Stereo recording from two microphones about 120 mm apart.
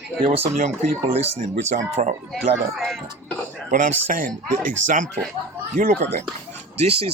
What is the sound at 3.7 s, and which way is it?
Speech, 90° right.